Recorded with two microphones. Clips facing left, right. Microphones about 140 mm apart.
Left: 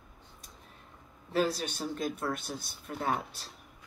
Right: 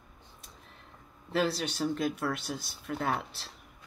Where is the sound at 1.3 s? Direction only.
45° left (ahead or behind).